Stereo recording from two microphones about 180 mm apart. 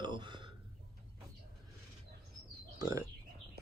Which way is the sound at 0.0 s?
25° right (ahead or behind).